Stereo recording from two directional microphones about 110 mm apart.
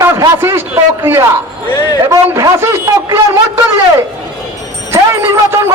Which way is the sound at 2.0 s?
30° right (ahead or behind).